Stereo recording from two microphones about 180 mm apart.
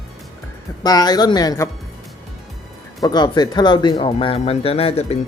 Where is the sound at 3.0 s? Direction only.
25° left (ahead or behind).